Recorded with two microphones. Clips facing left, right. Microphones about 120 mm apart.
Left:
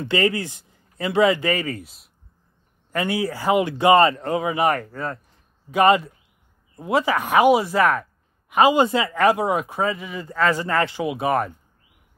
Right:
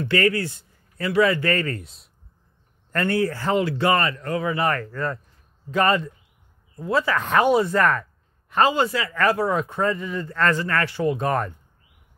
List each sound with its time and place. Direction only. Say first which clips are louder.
0.0 s speech: even; 20° left (ahead or behind)
9.6 s speech: right 1 dB; 5° left (ahead or behind)
11.1 s speech: left 1 dB; 5° left (ahead or behind)